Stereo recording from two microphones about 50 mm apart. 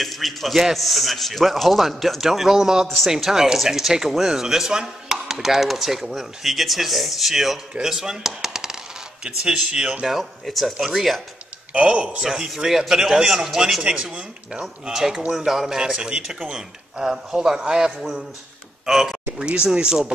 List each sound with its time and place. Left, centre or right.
0.0 s speech: centre
7.8 s coin: centre
10.0 s speech: centre
11.7 s a man's voice: right; by 15.8 s centre
15.8 s a man's voice: centre
19.3 s speech: centre